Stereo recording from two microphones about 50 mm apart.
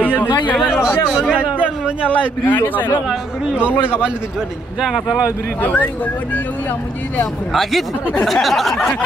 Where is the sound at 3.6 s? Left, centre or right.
Right.